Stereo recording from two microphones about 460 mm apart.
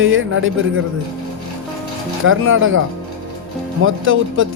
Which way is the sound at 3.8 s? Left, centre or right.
Right.